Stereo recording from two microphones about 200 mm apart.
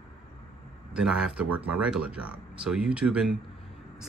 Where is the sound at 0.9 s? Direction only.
5° right (ahead or behind).